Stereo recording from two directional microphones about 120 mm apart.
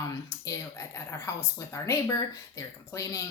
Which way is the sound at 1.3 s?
25° left (ahead or behind).